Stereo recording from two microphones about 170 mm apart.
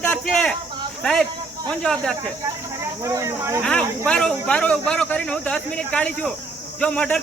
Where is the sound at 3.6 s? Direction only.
5° left (ahead or behind).